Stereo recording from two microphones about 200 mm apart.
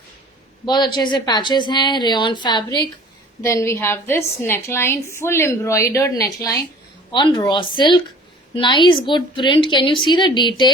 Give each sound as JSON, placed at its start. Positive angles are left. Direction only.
{"t": 0.6, "sound": "a woman's voice", "side_deg": 20}